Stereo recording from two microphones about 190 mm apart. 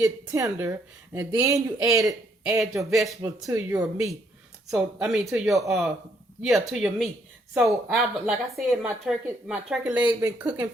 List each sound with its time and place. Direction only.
0.0 s speech: 15° right (ahead or behind)
2.6 s speech: centre (ahead or behind)
3.2 s speech: 20° right (ahead or behind)
4.7 s speech: 5° right (ahead or behind)